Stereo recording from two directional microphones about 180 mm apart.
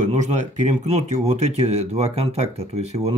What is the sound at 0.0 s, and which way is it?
Speech, 40° right (ahead or behind).